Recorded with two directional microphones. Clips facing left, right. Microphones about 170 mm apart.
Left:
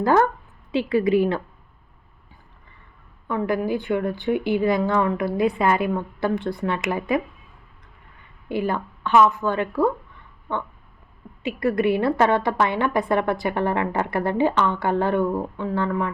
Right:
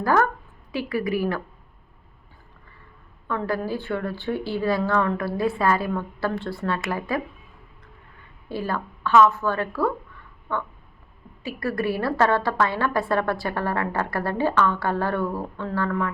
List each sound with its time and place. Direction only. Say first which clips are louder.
0.0 s a woman's voice: left 3 dB; 20° left (ahead or behind)
3.2 s speech: left 3 dB; 15° left (ahead or behind)
8.4 s a woman's voice: left 4 dB; 20° left (ahead or behind)